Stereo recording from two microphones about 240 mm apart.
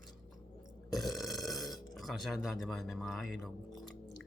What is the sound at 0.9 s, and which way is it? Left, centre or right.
Speech, centre.